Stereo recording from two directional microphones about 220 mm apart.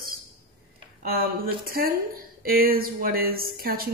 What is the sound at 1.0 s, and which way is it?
A woman's voice, 45° right (ahead or behind).